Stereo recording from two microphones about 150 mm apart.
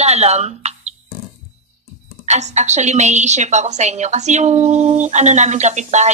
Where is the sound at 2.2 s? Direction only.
50° right (ahead or behind).